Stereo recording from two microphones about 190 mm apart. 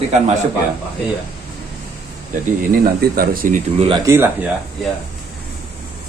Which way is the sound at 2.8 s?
50° right (ahead or behind).